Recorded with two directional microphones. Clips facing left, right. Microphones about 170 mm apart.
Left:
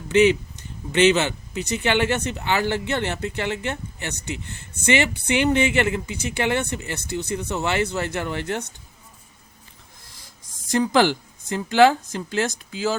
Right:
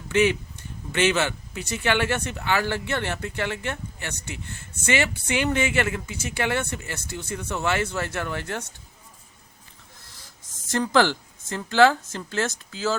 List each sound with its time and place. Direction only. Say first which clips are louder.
0.1 s speech: left 5 dB; 20° left (ahead or behind)
10.7 s speech: left 2 dB; 15° left (ahead or behind)